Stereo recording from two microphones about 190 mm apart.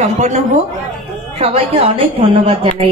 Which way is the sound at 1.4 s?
30° right (ahead or behind).